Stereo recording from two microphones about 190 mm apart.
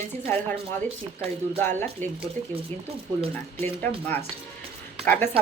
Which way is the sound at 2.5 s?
30° right (ahead or behind).